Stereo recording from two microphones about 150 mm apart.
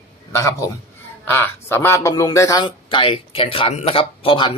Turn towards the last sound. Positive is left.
turn(degrees=35)  # may be behind; listen again after turning